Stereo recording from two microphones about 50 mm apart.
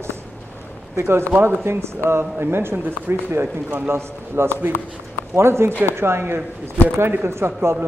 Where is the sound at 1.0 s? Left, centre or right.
Right.